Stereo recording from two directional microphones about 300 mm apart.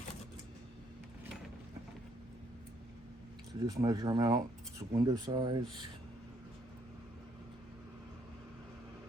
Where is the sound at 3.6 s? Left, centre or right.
Centre.